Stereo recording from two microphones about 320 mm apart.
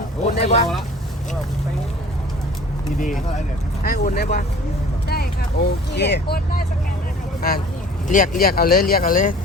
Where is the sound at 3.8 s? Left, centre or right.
Left.